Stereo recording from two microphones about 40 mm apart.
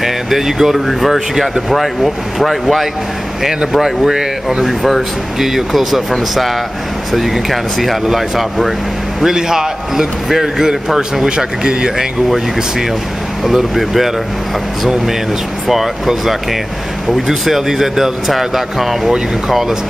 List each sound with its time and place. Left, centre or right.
0.0 s speech: centre
7.1 s speech: centre
13.4 s speech: centre
15.6 s speech: centre